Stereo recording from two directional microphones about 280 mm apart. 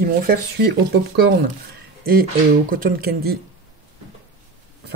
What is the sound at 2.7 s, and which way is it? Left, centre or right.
Speech, right.